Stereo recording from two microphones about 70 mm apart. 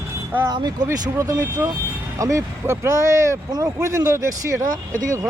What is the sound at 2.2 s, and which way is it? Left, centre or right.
Speech, right.